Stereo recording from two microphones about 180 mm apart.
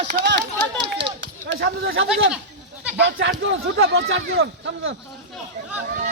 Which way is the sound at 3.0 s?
70° right (ahead or behind).